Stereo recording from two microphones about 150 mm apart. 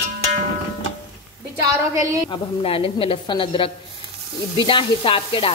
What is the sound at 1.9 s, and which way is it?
Speech, 20° right (ahead or behind).